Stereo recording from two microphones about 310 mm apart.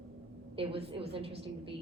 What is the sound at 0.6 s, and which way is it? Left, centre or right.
A woman's voice, centre.